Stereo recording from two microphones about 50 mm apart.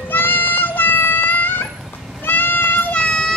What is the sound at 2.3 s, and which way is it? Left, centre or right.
Cat, left.